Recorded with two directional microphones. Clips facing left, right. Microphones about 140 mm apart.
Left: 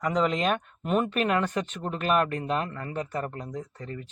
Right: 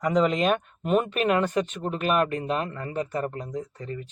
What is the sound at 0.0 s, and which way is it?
Speech, 20° right (ahead or behind).